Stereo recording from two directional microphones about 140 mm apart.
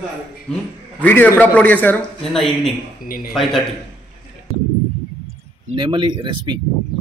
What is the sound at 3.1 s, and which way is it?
Speech, 90° left.